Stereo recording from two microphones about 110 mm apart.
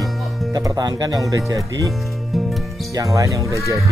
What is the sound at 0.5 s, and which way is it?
Speech, 35° right (ahead or behind).